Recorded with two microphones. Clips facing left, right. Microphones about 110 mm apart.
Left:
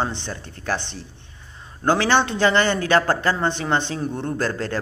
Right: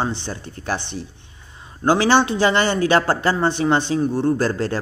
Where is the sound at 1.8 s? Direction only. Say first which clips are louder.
Right 3 dB; 10° right (ahead or behind).